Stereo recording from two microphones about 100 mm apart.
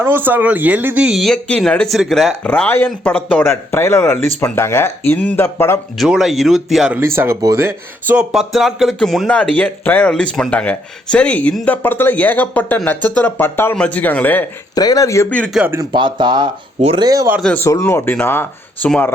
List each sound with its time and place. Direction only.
0.0 s speech: 20° right (ahead or behind)
1.0 s speech: centre (ahead or behind)
2.4 s speech: 15° left (ahead or behind)
6.0 s speech: 5° right (ahead or behind)
6.9 s speech: 25° right (ahead or behind); by 14.4 s 15° left (ahead or behind)
14.8 s speech: 40° left (ahead or behind)
15.6 s speech: 5° right (ahead or behind)
15.9 s speech: 50° right (ahead or behind)
17.0 s speech: 40° right (ahead or behind)
17.6 s speech: 25° left (ahead or behind)